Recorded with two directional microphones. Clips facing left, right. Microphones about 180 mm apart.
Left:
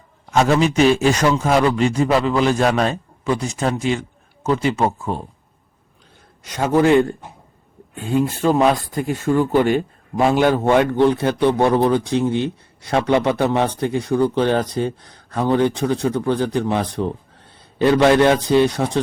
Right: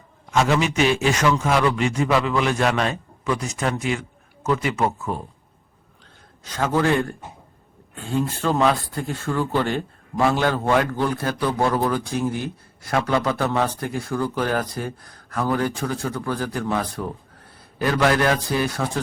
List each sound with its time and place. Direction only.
0.3 s a man's voice: 40° left (ahead or behind)
6.4 s a man's voice: 15° left (ahead or behind)